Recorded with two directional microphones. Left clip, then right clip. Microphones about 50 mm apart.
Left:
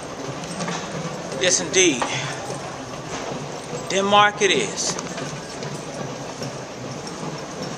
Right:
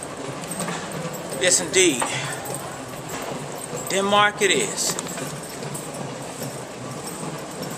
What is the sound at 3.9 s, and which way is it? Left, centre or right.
Speech, centre.